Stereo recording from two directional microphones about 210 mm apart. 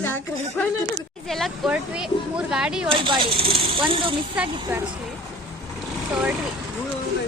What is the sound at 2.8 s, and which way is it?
Speech, 25° right (ahead or behind).